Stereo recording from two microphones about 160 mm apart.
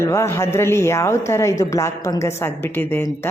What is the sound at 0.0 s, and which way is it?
Speech, 20° left (ahead or behind).